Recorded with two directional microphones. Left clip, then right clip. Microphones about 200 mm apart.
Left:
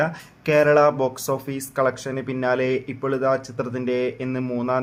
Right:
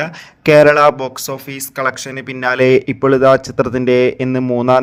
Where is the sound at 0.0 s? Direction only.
40° right (ahead or behind).